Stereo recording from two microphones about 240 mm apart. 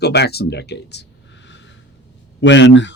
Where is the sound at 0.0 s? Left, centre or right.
Left.